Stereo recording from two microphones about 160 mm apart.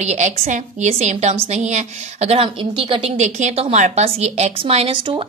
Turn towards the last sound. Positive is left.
turn(degrees=-35)  # may be behind; listen again after turning